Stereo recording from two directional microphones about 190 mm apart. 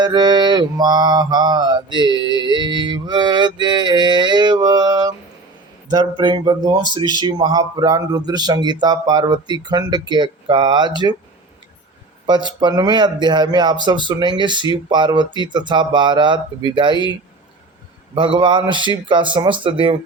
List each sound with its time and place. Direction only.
0.0 s speech: 20° right (ahead or behind)
12.5 s speech: 20° right (ahead or behind)
18.1 s speech: 25° right (ahead or behind)